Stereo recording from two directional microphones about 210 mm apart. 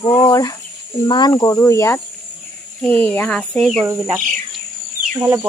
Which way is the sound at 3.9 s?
10° right (ahead or behind).